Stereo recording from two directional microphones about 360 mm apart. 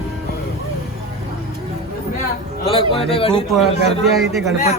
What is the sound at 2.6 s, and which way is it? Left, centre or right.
Speech, centre.